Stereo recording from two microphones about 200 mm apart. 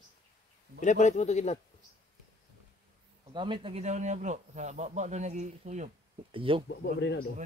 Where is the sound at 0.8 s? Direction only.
35° left (ahead or behind).